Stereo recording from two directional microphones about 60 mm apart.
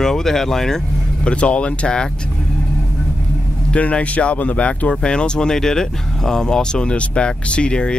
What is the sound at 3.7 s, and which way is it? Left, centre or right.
Speech, left.